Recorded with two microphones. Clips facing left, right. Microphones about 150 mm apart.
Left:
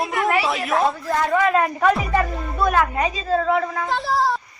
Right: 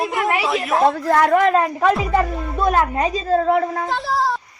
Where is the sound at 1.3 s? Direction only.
45° right (ahead or behind).